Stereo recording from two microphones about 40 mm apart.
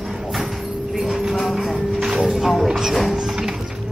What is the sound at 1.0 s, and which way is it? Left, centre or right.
Music, centre.